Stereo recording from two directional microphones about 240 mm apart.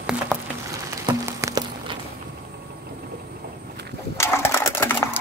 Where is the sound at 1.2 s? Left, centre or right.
Centre.